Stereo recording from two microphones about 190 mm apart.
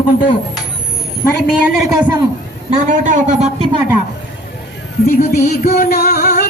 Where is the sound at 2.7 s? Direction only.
40° right (ahead or behind).